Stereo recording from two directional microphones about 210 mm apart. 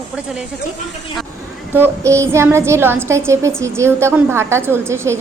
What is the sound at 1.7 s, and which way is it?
A woman's voice, 10° right (ahead or behind).